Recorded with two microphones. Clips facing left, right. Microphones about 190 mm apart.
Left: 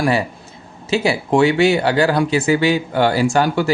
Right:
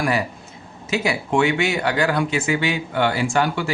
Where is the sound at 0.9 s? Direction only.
30° left (ahead or behind).